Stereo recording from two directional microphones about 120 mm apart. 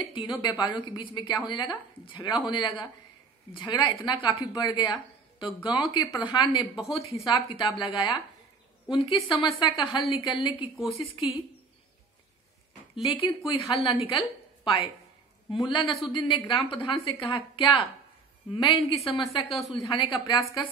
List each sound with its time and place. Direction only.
0.0 s a woman's voice: 40° left (ahead or behind)
6.9 s a woman's voice: 50° left (ahead or behind)
13.0 s a woman's voice: 50° left (ahead or behind)
19.2 s speech: centre (ahead or behind)
19.7 s a woman's voice: 45° left (ahead or behind)